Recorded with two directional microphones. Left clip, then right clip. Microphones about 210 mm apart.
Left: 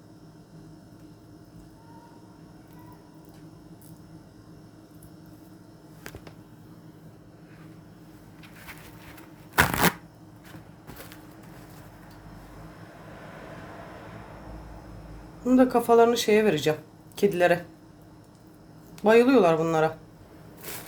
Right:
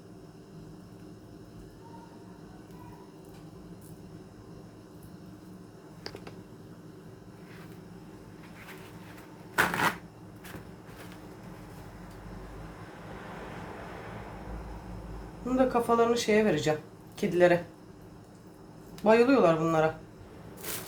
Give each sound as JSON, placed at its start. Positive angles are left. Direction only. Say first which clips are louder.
{"t": 9.6, "sound": "shuffling cards", "louder": "left 4 dB", "side_deg": 45}
{"t": 15.4, "sound": "speech", "louder": "left 5 dB", "side_deg": 50}
{"t": 19.0, "sound": "speech", "louder": "left 3 dB", "side_deg": 50}